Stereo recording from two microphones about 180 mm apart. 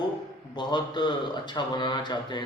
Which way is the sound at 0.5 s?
25° left (ahead or behind).